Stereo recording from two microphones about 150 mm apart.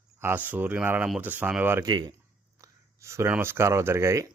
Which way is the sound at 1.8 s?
25° right (ahead or behind).